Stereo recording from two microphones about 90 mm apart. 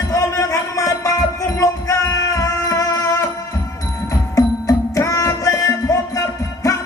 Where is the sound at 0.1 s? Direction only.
35° left (ahead or behind).